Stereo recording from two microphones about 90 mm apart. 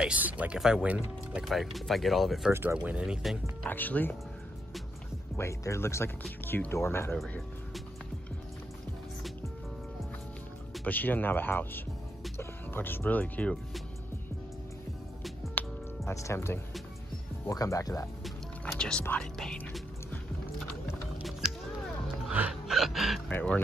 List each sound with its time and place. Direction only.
0.0 s speech: 15° right (ahead or behind)
2.5 s speech: 25° right (ahead or behind)
2.8 s speech: 10° right (ahead or behind)
3.6 s speech: 20° left (ahead or behind)
5.4 s speech: 35° left (ahead or behind)
7.2 s speech: centre (ahead or behind)
10.9 s speech: 20° left (ahead or behind)
15.6 s music: 20° left (ahead or behind)
16.1 s speech: 30° left (ahead or behind)
18.2 s music: 5° left (ahead or behind)
19.3 s speech: 5° left (ahead or behind)
21.2 s music: centre (ahead or behind)
22.5 s music: 5° right (ahead or behind)
23.3 s speech: 15° left (ahead or behind)